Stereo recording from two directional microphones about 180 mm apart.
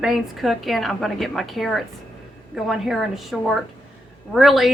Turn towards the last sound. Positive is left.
turn(degrees=0)  # may be behind; listen again after turning